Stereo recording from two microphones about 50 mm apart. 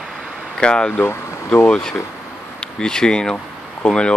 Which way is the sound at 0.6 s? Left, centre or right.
Centre.